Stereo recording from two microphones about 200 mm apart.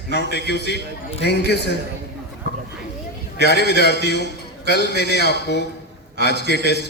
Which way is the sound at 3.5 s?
55° left (ahead or behind).